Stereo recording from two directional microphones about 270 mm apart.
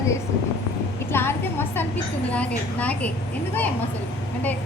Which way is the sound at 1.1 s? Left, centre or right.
Centre.